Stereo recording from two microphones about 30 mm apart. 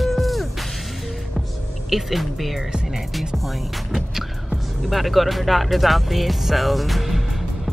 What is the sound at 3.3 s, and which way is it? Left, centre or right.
Music, centre.